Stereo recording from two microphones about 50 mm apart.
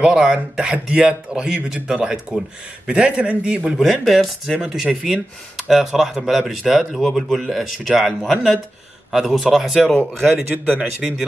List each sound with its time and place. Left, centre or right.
0.0 s speech: centre
3.7 s speech: centre
4.5 s speech: centre
9.1 s speech: centre
9.9 s a man's voice: right
10.8 s speech: centre